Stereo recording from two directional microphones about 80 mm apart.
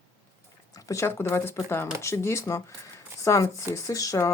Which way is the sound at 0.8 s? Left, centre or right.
Left.